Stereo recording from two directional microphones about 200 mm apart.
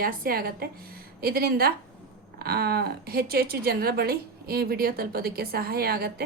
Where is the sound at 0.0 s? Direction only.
45° right (ahead or behind).